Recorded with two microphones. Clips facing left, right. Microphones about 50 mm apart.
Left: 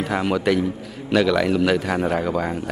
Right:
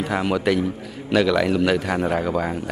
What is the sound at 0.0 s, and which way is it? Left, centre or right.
A man's voice, centre.